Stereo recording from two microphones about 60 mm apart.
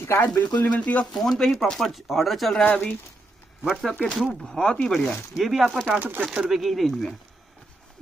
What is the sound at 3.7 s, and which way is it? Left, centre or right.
Speech, centre.